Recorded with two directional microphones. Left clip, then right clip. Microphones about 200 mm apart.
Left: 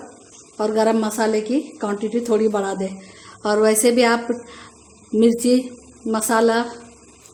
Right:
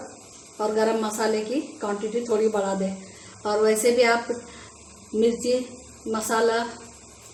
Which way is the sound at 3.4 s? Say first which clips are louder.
Left 4 dB; 55° left (ahead or behind).